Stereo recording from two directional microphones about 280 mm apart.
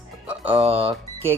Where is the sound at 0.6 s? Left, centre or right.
Centre.